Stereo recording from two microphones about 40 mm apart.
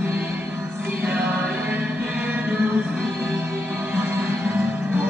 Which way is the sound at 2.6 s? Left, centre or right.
Right.